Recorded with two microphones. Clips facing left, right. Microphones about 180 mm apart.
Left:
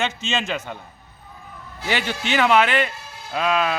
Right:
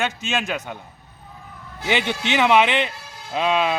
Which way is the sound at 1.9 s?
20° right (ahead or behind).